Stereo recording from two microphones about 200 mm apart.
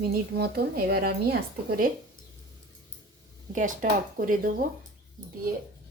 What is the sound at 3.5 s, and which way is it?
A woman's voice, 40° right (ahead or behind).